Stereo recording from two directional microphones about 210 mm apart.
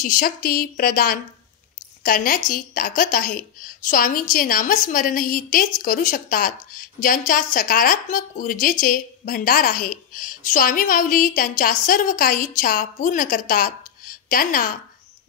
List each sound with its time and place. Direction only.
0.0 s a woman's voice: 40° left (ahead or behind)